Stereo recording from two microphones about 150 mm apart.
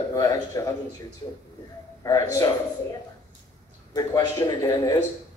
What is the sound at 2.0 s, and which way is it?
Speech, 25° left (ahead or behind).